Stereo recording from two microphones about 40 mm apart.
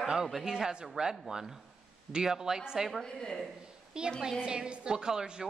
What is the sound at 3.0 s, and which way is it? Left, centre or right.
Speech, centre.